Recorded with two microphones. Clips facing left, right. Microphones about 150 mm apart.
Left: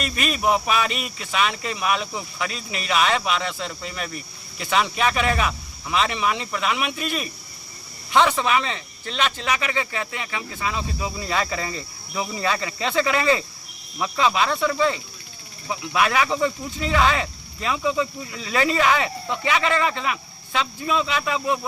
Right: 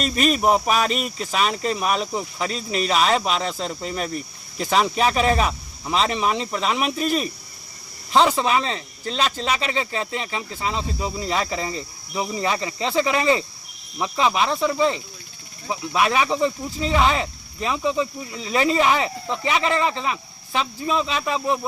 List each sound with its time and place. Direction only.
0.0 s speech: 40° right (ahead or behind)